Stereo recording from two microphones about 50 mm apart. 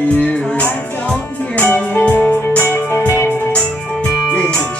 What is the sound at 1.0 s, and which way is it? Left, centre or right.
Music, left.